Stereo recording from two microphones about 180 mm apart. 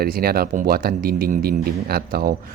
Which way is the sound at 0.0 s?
55° right (ahead or behind).